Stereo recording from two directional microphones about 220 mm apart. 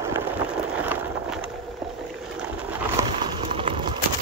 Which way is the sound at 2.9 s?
20° right (ahead or behind).